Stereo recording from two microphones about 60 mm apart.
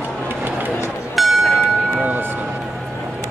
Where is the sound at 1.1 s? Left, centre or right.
Centre.